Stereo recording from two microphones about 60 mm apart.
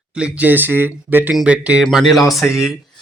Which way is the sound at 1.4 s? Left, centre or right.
Right.